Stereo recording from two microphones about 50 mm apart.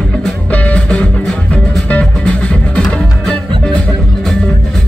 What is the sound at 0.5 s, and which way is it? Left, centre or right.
Music, left.